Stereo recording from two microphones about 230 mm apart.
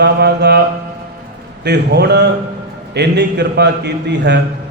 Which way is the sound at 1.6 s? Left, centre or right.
Right.